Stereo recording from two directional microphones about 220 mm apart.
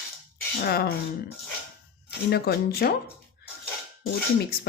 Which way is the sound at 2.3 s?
45° left (ahead or behind).